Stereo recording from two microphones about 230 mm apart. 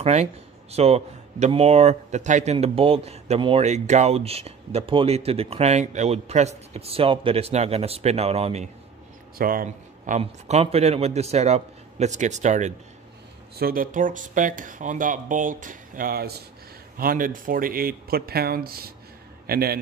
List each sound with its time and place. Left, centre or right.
0.0 s speech: right
9.4 s a man's voice: right